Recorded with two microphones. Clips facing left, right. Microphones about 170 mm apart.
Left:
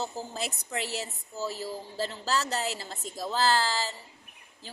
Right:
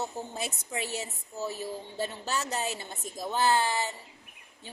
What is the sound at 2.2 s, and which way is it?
A woman's voice, 20° right (ahead or behind).